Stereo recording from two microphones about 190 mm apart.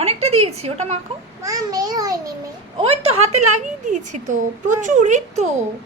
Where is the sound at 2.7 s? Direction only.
30° right (ahead or behind).